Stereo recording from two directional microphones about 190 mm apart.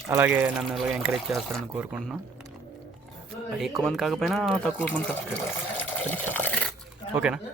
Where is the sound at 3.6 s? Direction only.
Centre (ahead or behind).